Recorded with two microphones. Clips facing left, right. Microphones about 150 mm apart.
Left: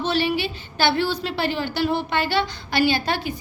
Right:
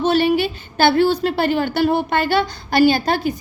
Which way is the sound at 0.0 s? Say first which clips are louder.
Right 6 dB; 50° right (ahead or behind).